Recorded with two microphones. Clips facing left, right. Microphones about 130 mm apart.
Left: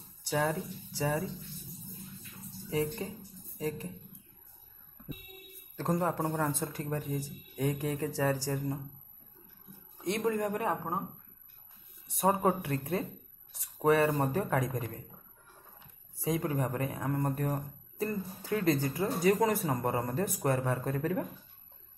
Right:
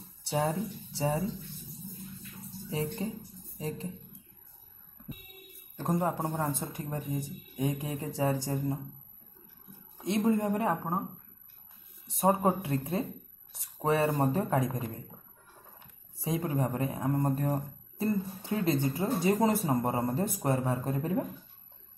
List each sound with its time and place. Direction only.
0.9 s speech: 25° right (ahead or behind)
2.7 s speech: 25° right (ahead or behind)
5.8 s speech: 20° right (ahead or behind)
10.0 s speech: 25° right (ahead or behind)
10.7 s a woman's voice: 10° right (ahead or behind)
12.1 s speech: 25° right (ahead or behind)
16.2 s speech: 25° right (ahead or behind)